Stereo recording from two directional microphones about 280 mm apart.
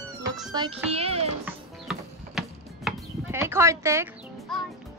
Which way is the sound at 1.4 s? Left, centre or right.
Centre.